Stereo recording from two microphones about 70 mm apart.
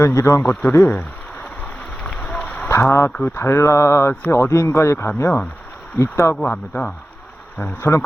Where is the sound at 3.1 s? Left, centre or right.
Left.